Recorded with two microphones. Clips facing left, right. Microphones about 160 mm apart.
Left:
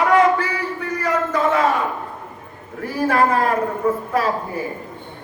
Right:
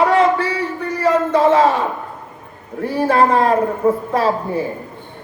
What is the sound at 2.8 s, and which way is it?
A man's voice, 30° right (ahead or behind).